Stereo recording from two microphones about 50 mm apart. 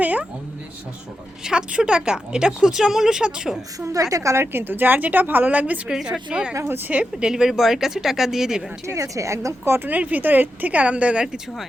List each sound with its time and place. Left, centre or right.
0.0 s a sound: right
1.5 s speech: centre
3.8 s a woman's voice: right
4.5 s a woman's voice: right
5.9 s speech: centre
8.9 s a woman's voice: right
10.0 s a woman's voice: right